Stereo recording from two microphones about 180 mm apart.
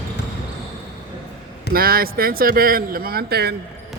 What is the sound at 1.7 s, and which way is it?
Speech, 55° right (ahead or behind).